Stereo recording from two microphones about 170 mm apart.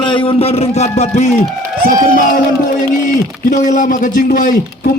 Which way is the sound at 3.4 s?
45° left (ahead or behind).